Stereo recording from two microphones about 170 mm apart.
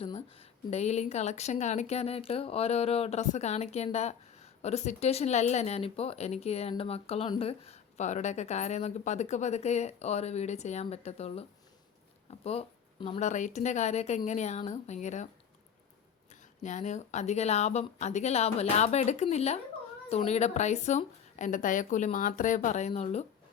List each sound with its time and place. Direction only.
0.0 s a woman's voice: 35° left (ahead or behind)
16.6 s a woman's voice: 45° left (ahead or behind)
22.9 s a woman's voice: 35° left (ahead or behind)